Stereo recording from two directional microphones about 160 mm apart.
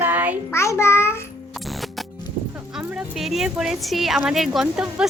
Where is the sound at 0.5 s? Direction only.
15° left (ahead or behind).